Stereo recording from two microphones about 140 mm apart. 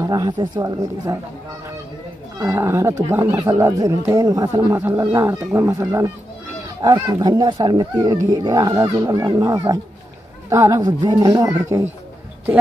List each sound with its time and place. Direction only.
0.0 s speech: 30° right (ahead or behind)
2.3 s speech: 20° right (ahead or behind)